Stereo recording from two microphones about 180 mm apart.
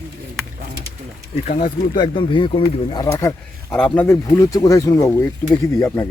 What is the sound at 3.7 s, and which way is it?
Speech, 5° left (ahead or behind).